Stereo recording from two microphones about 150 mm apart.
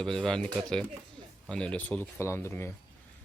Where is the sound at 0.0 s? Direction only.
5° left (ahead or behind).